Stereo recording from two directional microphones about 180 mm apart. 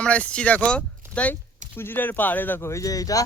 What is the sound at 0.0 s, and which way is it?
Speech, 5° left (ahead or behind).